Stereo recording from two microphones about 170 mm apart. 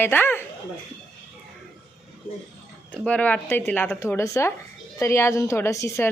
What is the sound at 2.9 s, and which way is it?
Speech, 10° left (ahead or behind).